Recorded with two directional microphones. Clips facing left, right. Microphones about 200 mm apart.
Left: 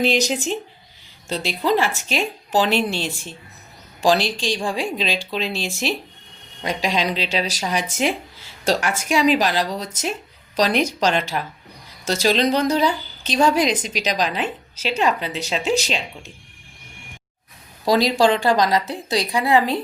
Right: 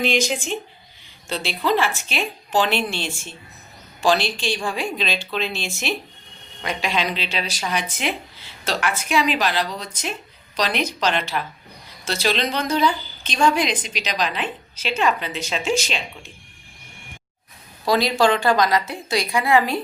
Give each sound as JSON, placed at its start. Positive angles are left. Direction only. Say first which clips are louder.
{"t": 0.0, "sound": "speech", "louder": "left 2 dB", "side_deg": 40}
{"t": 17.8, "sound": "speech", "louder": "left 2 dB", "side_deg": 35}